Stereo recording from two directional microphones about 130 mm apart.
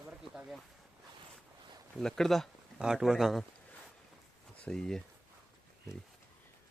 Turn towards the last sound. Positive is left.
turn(degrees=5)  # may be behind; listen again after turning